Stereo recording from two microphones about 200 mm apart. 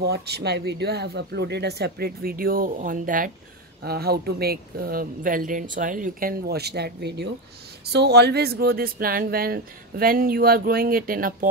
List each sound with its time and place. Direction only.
0.0 s speech: 55° right (ahead or behind)